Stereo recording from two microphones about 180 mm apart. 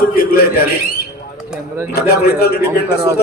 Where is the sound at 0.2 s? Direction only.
55° left (ahead or behind).